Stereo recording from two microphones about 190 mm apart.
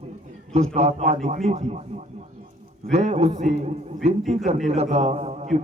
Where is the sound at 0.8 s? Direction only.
35° right (ahead or behind).